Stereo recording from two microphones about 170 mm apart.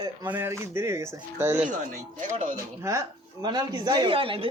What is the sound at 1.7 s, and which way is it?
Speech, 45° right (ahead or behind).